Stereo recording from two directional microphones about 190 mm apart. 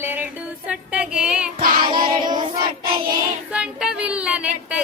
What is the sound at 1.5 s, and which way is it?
Child singing, 25° right (ahead or behind).